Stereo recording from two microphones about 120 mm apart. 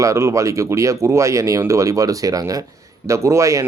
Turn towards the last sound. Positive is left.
turn(degrees=-25)  # may be behind; listen again after turning